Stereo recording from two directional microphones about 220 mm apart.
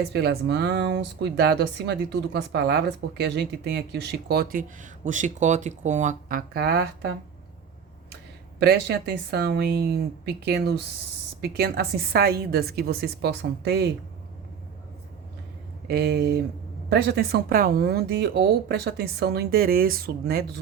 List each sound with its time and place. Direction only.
0.1 s speech: 50° right (ahead or behind)
8.5 s speech: 50° right (ahead or behind)
15.9 s speech: 50° right (ahead or behind)